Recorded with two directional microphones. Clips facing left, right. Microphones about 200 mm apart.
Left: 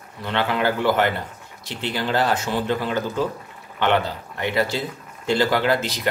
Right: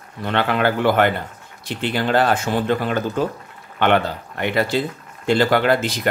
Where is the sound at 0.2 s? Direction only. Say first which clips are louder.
Right 3 dB; 55° right (ahead or behind).